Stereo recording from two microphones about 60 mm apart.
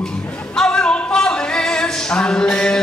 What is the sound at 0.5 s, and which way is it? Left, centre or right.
Music, centre.